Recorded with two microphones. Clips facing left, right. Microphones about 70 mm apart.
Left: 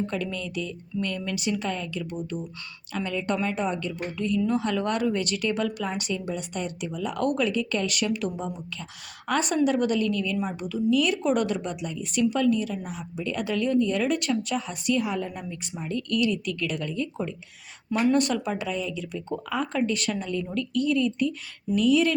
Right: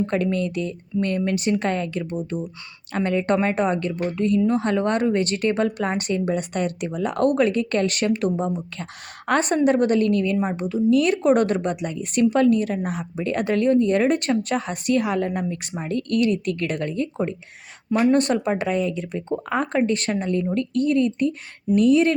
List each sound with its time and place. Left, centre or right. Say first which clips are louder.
0.0 s a woman's voice: right 8 dB; right